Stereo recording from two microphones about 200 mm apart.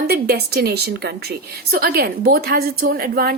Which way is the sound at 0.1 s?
50° right (ahead or behind).